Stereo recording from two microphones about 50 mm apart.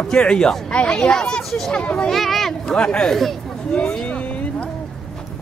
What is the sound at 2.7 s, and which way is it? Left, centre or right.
Speech, centre.